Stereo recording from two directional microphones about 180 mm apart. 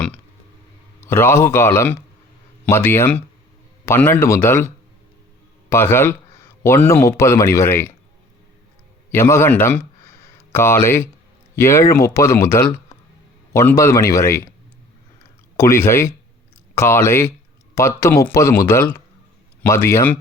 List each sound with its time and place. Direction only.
1.0 s speech: 15° left (ahead or behind)
9.1 s speech: 15° left (ahead or behind)
15.5 s speech: 15° left (ahead or behind)